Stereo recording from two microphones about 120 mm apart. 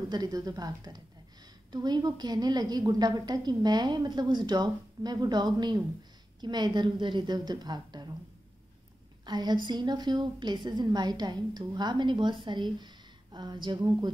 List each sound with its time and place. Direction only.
0.1 s a woman's voice: 30° right (ahead or behind)
9.2 s a woman's voice: 35° right (ahead or behind)